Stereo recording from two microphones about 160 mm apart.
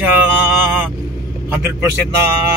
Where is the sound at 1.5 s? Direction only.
15° right (ahead or behind).